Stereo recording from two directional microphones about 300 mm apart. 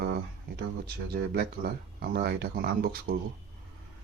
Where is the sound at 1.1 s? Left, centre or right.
Right.